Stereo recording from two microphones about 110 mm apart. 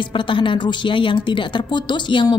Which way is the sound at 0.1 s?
50° left (ahead or behind).